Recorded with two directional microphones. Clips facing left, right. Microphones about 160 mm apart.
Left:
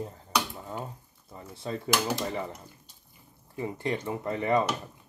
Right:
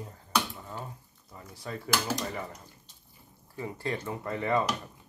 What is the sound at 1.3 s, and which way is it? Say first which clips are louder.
Speech: left 4 dB; 25° left (ahead or behind).